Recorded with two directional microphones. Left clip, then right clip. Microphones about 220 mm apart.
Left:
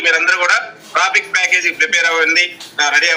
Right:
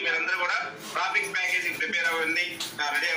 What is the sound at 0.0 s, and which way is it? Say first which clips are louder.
A man's voice: left 13 dB; 45° left (ahead or behind).